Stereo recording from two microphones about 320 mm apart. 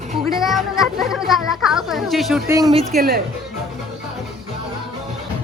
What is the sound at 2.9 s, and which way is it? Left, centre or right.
Speech, right.